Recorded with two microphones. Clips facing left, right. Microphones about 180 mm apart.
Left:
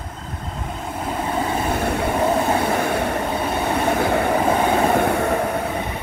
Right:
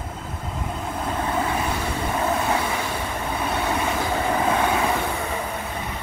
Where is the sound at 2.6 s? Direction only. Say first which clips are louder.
Left 7 dB; 55° left (ahead or behind).